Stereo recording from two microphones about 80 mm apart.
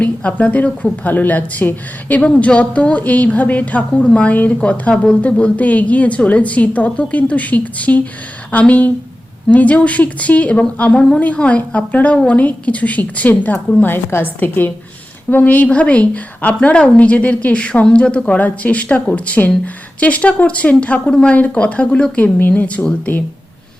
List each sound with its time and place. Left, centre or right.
0.0 s a woman's voice: centre